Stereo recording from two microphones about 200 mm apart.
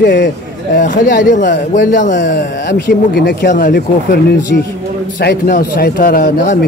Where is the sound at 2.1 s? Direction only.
65° left (ahead or behind).